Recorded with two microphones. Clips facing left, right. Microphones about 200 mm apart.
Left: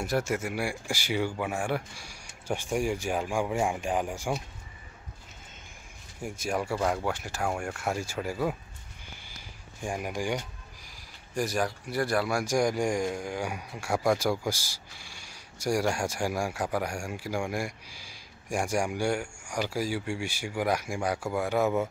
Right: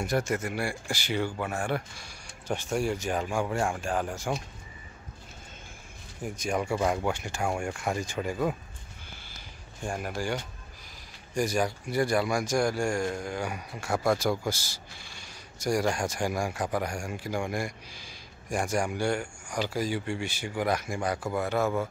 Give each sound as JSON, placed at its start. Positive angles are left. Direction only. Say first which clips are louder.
{"t": 0.0, "sound": "a man's voice", "louder": "even", "side_deg": 5}
{"t": 6.2, "sound": "speech", "louder": "right 1 dB", "side_deg": 5}
{"t": 9.8, "sound": "a man's voice", "louder": "left 1 dB", "side_deg": 15}
{"t": 11.3, "sound": "a man's voice", "louder": "right 2 dB", "side_deg": 0}